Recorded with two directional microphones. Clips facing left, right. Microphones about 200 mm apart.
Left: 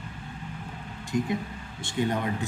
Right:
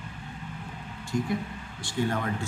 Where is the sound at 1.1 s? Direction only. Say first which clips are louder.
Left 1 dB; 20° left (ahead or behind).